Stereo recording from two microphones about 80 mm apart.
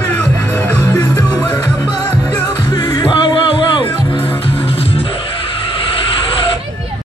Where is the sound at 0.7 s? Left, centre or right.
Left.